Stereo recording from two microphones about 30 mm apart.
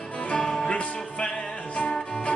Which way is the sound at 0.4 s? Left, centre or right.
Left.